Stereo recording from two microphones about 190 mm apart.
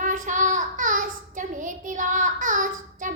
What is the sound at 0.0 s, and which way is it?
Child singing, 45° right (ahead or behind).